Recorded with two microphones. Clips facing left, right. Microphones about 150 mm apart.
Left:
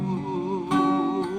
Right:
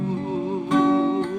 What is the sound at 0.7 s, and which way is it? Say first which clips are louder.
Music: right 4 dB; 15° left (ahead or behind).